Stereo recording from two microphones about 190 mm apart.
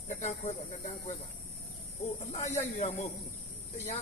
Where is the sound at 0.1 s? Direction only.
35° left (ahead or behind).